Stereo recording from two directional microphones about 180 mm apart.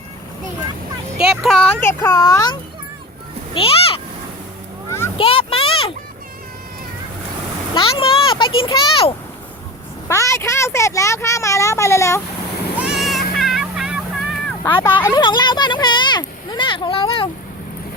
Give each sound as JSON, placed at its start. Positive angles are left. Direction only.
{"t": 1.2, "sound": "speech", "side_deg": 0}
{"t": 3.5, "sound": "speech", "side_deg": 30}
{"t": 4.9, "sound": "a sound", "side_deg": 15}
{"t": 5.1, "sound": "a sound", "side_deg": 30}
{"t": 7.7, "sound": "a child's voice", "side_deg": 30}
{"t": 10.1, "sound": "speech", "side_deg": 15}
{"t": 12.7, "sound": "vehicle", "side_deg": -5}
{"t": 14.6, "sound": "speech", "side_deg": 10}
{"t": 15.0, "sound": "speech", "side_deg": 25}